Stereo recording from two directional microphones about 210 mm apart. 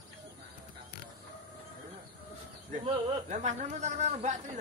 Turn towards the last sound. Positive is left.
turn(degrees=-30)  # may be behind; listen again after turning